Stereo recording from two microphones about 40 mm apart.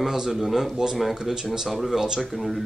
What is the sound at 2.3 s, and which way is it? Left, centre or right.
Speech, centre.